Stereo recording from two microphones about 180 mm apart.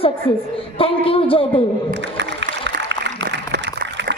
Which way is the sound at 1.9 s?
75° right (ahead or behind).